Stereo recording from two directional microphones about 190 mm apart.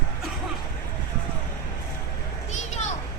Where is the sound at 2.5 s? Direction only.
40° left (ahead or behind).